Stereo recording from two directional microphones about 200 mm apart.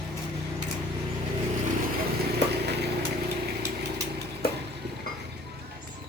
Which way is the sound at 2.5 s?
55° right (ahead or behind).